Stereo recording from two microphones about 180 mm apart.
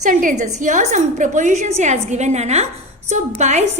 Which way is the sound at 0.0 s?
45° right (ahead or behind).